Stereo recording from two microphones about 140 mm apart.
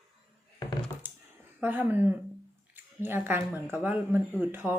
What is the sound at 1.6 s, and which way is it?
Speech, 15° right (ahead or behind).